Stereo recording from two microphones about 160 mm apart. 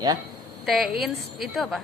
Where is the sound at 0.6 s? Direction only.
Centre (ahead or behind).